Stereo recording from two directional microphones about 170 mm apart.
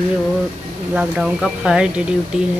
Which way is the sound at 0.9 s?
5° right (ahead or behind).